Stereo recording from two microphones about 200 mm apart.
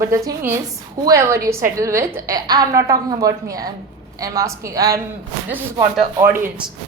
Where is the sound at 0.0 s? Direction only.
15° right (ahead or behind).